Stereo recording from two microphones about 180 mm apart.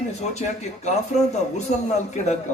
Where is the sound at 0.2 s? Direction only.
40° left (ahead or behind).